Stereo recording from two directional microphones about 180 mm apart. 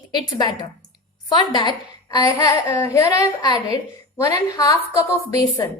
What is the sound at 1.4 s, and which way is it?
A child's voice, 25° left (ahead or behind).